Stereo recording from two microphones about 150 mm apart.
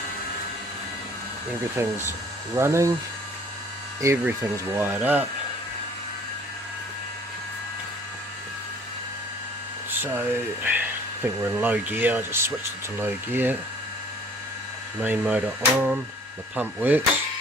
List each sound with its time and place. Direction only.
1.8 s speech: 15° right (ahead or behind)
4.0 s speech: 20° right (ahead or behind)
10.0 s speech: 15° right (ahead or behind)
15.0 s speech: 10° right (ahead or behind)